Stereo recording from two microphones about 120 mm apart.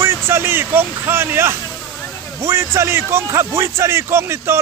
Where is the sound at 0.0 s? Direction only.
20° right (ahead or behind).